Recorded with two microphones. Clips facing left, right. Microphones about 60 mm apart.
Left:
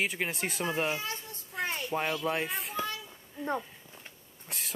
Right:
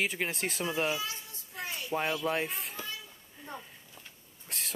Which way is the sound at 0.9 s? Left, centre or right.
Left.